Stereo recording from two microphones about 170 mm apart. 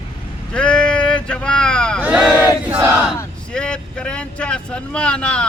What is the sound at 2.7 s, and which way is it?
Battle cry, 15° right (ahead or behind).